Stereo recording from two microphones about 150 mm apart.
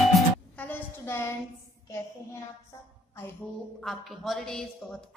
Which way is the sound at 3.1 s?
15° left (ahead or behind).